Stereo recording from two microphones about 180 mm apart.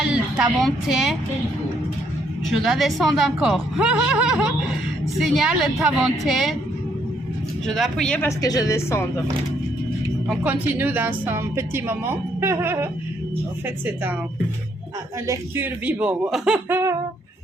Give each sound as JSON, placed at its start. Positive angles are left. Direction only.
{"t": 0.1, "sound": "a woman's voice", "side_deg": -5}
{"t": 2.5, "sound": "a woman's voice", "side_deg": 0}
{"t": 7.7, "sound": "a woman's voice", "side_deg": 5}
{"t": 8.3, "sound": "a woman's voice", "side_deg": 20}
{"t": 10.2, "sound": "a woman's voice", "side_deg": -10}
{"t": 15.3, "sound": "a woman's voice", "side_deg": -10}